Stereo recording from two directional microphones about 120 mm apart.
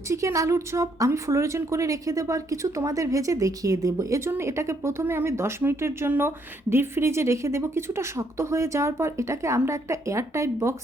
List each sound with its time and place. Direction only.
0.1 s speech: 25° right (ahead or behind)